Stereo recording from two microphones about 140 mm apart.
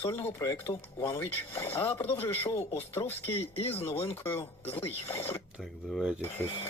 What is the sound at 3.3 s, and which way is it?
Speech, 45° left (ahead or behind).